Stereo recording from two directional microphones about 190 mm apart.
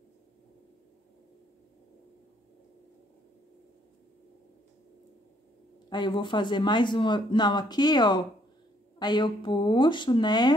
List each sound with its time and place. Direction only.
5.9 s speech: 25° left (ahead or behind)